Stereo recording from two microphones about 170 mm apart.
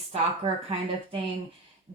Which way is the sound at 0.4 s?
30° right (ahead or behind).